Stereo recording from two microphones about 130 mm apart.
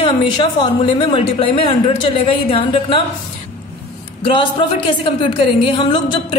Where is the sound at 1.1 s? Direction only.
45° left (ahead or behind).